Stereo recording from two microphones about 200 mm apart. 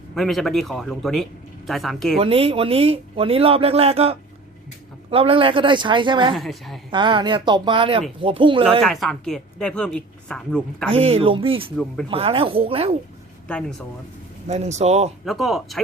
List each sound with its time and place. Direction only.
0.1 s a woman's voice: centre (ahead or behind)
2.1 s speech: 30° right (ahead or behind)
6.3 s a woman's voice: centre (ahead or behind)
6.9 s speech: 25° right (ahead or behind)
8.8 s a woman's voice: centre (ahead or behind)
10.9 s speech: 30° right (ahead or behind)
13.5 s a woman's voice: 5° left (ahead or behind)
14.4 s speech: 35° right (ahead or behind)
15.2 s a woman's voice: centre (ahead or behind)